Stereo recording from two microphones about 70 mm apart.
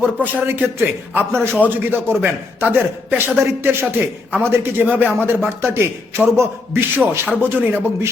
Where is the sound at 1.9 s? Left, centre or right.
Right.